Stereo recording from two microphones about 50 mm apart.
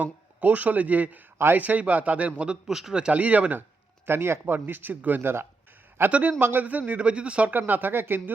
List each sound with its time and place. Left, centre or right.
0.0 s speech: right
2.6 s a man's voice: centre
3.0 s speech: right
4.0 s speech: right
6.1 s speech: right
6.4 s speech: right
7.7 s speech: right